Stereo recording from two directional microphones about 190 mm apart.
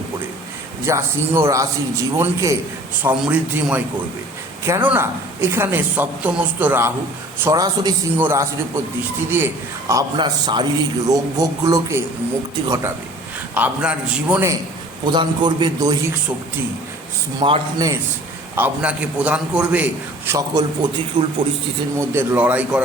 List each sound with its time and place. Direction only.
0.9 s a man's voice: 15° right (ahead or behind)
15.0 s a man's voice: 25° right (ahead or behind)
17.4 s a man's voice: 25° right (ahead or behind)
18.5 s a man's voice: 10° right (ahead or behind)